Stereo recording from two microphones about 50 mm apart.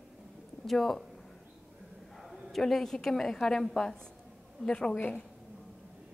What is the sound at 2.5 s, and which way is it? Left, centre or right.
A woman's voice, centre.